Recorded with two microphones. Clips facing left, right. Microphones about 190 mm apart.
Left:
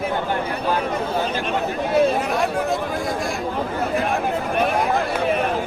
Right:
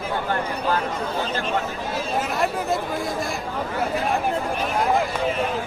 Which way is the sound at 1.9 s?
60° left (ahead or behind).